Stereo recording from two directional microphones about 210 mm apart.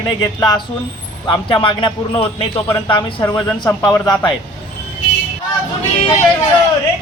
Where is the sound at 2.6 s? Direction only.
10° left (ahead or behind).